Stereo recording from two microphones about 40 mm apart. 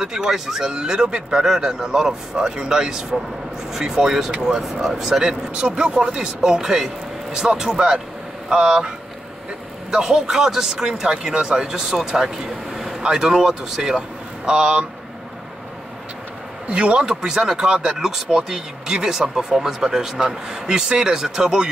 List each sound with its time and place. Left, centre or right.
0.0 s speech: centre
5.5 s speech: right
16.6 s speech: right
17.0 s speech: centre